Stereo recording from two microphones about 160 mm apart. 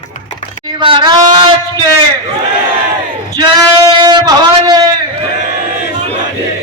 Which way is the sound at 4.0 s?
25° right (ahead or behind).